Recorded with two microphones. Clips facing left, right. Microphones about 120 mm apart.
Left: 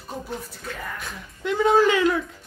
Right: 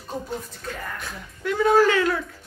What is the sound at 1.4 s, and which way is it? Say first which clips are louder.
Speech: even; 20° left (ahead or behind).